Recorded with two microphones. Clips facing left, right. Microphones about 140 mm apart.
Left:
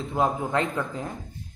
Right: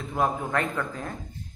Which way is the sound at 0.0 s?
20° left (ahead or behind).